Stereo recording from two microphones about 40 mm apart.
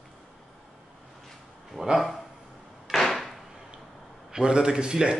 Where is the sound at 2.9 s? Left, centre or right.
Centre.